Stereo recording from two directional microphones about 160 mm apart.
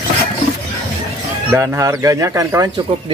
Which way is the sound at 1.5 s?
15° right (ahead or behind).